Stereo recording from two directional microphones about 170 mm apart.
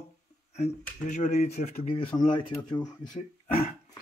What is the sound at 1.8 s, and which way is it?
Speech, 35° left (ahead or behind).